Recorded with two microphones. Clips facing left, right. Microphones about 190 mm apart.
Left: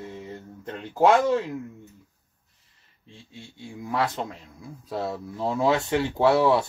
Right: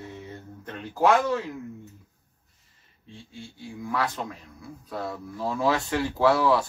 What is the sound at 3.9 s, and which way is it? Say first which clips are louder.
Speech: left 2 dB; 25° left (ahead or behind).